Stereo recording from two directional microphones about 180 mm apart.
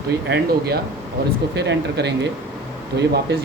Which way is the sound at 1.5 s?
70° right (ahead or behind).